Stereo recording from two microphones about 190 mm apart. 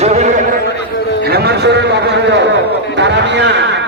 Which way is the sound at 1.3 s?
60° right (ahead or behind).